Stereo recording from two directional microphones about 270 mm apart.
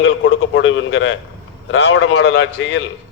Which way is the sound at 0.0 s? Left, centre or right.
Left.